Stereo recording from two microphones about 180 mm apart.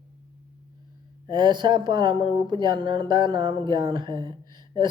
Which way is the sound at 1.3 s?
25° right (ahead or behind).